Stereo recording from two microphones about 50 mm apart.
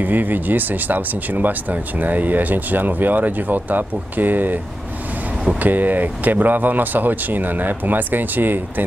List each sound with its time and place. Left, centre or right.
0.0 s speech: right
5.6 s speech: right